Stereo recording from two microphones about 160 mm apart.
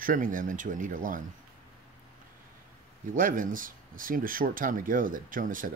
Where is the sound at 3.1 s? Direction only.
55° right (ahead or behind).